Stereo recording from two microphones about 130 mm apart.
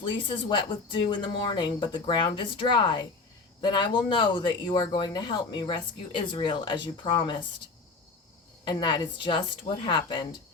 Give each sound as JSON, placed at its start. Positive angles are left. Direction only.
{"t": 0.0, "sound": "speech", "side_deg": 40}
{"t": 8.6, "sound": "speech", "side_deg": 35}